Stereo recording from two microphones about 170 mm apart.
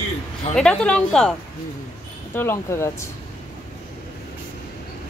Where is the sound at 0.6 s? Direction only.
5° left (ahead or behind).